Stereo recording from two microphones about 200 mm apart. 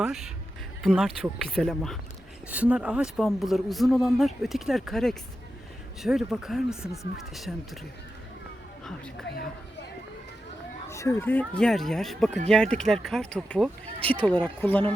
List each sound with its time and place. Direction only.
0.0 s speech: centre (ahead or behind)
9.2 s speech: 50° left (ahead or behind)
10.8 s speech: 15° left (ahead or behind)